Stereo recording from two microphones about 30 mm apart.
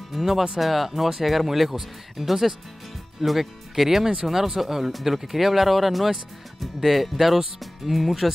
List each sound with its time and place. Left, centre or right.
0.1 s speech: centre